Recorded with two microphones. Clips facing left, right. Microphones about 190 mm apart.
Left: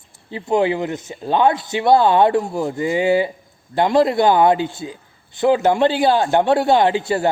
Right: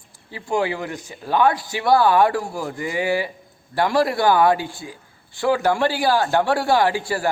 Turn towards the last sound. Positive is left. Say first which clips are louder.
# left 4 dB
turn(degrees=20)  # may be behind; listen again after turning